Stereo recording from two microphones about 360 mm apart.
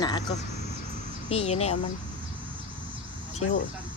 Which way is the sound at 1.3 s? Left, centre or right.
Centre.